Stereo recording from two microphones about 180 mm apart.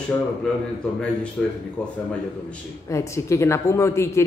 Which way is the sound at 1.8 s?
5° left (ahead or behind).